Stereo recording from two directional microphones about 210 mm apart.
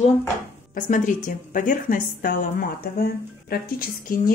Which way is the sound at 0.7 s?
40° left (ahead or behind).